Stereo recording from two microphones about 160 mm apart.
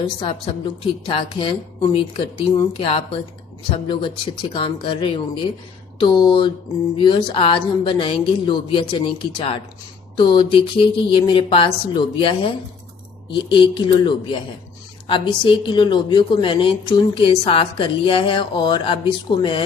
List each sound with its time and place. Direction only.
0.0 s a woman's voice: 30° left (ahead or behind)